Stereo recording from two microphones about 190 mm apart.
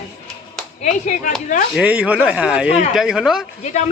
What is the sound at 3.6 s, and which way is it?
Speech, 35° left (ahead or behind).